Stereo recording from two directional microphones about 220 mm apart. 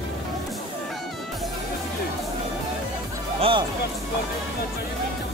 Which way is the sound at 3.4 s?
25° right (ahead or behind).